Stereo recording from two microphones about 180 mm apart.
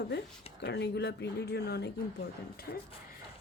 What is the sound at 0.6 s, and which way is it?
Speech, 70° left (ahead or behind).